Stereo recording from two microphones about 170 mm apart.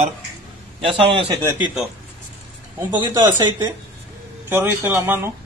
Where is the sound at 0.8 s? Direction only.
30° right (ahead or behind).